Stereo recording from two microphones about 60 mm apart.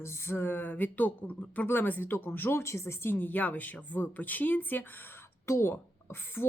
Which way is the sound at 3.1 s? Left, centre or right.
Left.